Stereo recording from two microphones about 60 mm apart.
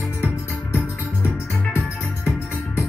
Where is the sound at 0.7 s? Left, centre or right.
Left.